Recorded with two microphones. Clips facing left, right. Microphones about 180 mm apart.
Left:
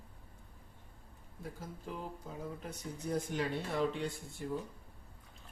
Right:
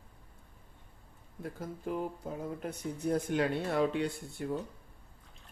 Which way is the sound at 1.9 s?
55° right (ahead or behind).